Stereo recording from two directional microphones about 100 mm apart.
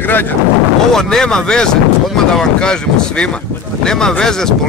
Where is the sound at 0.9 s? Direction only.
5° left (ahead or behind).